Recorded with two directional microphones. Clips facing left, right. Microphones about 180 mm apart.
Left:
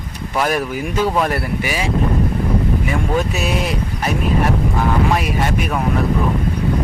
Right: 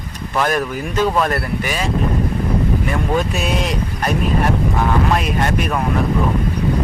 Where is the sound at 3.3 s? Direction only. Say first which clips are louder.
Even; 5° left (ahead or behind).